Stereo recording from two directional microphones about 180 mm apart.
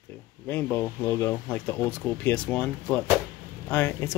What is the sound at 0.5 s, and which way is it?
Speech, 10° left (ahead or behind).